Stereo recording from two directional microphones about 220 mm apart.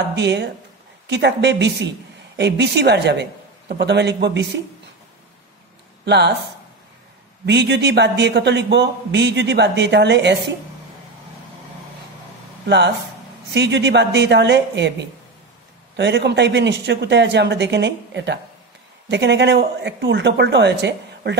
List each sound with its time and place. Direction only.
0.1 s a woman's voice: 50° right (ahead or behind)
6.0 s speech: 50° right (ahead or behind)
7.4 s speech: 50° right (ahead or behind)
12.6 s speech: 50° right (ahead or behind)